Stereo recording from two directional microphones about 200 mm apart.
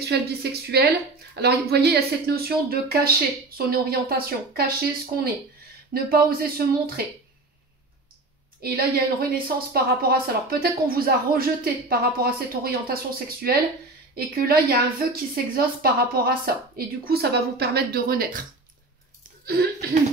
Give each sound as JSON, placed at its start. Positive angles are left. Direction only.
{"t": 0.0, "sound": "speech", "side_deg": -55}
{"t": 5.9, "sound": "speech", "side_deg": -45}
{"t": 8.6, "sound": "speech", "side_deg": -50}
{"t": 19.4, "sound": "speech", "side_deg": -50}